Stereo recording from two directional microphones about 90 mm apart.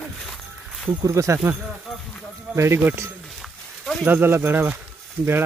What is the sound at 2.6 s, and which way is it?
Speech, 30° right (ahead or behind).